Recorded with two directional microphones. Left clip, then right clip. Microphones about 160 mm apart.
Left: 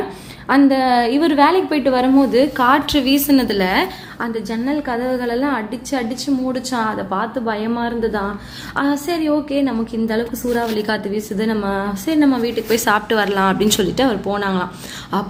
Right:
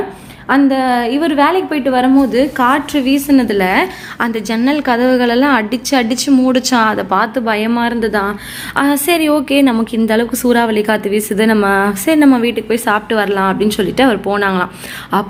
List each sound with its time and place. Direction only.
0.4 s a woman's voice: 5° right (ahead or behind)